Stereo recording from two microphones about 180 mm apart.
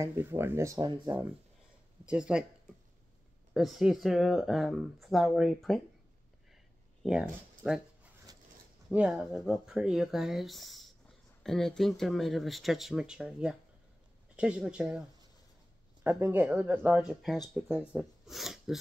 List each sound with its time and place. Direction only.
0.0 s speech: 15° right (ahead or behind)
2.0 s speech: 5° right (ahead or behind)
3.5 s speech: centre (ahead or behind)
7.0 s speech: 5° right (ahead or behind)